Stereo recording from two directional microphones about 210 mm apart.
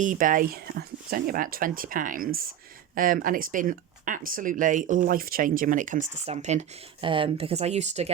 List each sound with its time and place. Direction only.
0.0 s speech: 40° right (ahead or behind)